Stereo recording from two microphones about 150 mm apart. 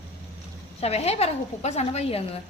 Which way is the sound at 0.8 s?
45° left (ahead or behind).